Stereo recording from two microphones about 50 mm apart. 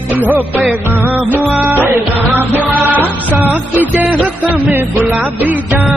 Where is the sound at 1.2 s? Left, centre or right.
Right.